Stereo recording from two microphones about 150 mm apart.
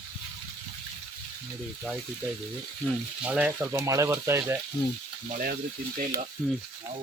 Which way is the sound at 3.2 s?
10° right (ahead or behind).